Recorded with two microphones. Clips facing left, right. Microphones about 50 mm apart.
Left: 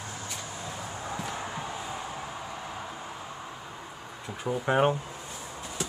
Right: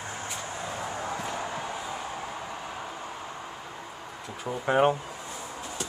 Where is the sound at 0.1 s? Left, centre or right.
Right.